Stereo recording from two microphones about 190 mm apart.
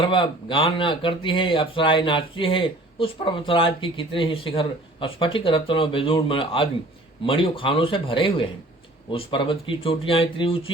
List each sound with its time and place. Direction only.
0.0 s speech: 25° left (ahead or behind)